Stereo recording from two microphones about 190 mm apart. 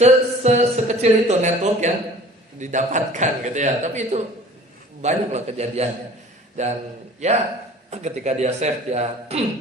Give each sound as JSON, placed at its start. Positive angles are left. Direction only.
{"t": 0.0, "sound": "speech", "side_deg": -35}
{"t": 7.9, "sound": "speech", "side_deg": -35}